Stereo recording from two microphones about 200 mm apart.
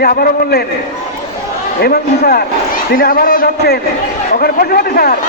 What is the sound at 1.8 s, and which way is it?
A man's voice, 50° left (ahead or behind).